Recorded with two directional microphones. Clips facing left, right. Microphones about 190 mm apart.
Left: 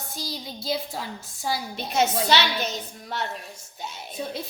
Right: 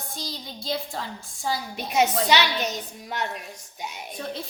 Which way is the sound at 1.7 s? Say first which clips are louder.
Right 2 dB; 15° right (ahead or behind).